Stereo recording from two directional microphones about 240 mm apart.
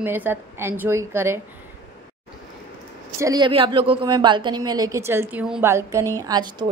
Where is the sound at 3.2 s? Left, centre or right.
Centre.